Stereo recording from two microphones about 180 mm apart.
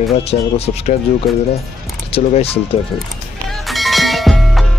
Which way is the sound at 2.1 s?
35° left (ahead or behind).